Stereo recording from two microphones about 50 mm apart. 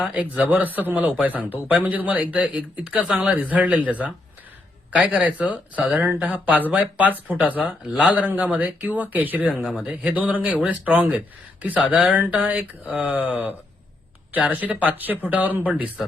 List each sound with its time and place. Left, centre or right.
0.1 s a man's voice: right